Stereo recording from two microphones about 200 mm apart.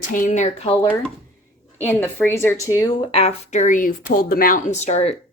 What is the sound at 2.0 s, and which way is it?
Speech, 10° left (ahead or behind).